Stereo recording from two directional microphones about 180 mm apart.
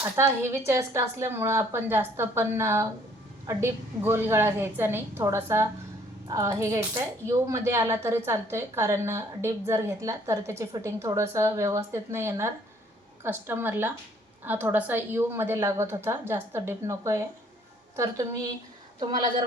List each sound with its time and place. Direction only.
0.0 s speech: 15° right (ahead or behind)